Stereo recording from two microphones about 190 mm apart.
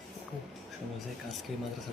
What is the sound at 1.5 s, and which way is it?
Speech, centre (ahead or behind).